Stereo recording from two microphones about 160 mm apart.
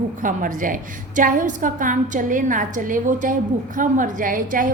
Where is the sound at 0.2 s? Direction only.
55° right (ahead or behind).